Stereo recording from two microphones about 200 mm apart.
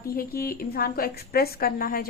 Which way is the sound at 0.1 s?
50° left (ahead or behind).